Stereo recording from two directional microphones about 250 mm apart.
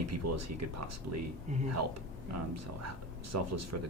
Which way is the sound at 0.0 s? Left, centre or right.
Right.